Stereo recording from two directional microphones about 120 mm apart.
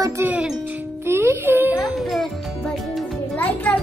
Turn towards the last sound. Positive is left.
turn(degrees=15)  # may be behind; listen again after turning